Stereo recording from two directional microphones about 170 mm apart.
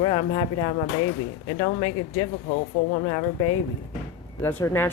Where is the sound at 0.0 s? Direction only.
30° left (ahead or behind).